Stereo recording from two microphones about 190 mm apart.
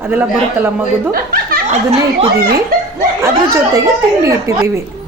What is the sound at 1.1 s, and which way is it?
Speech, 50° right (ahead or behind).